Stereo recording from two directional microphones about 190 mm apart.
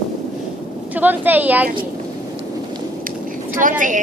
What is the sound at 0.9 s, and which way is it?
Speech, 10° right (ahead or behind).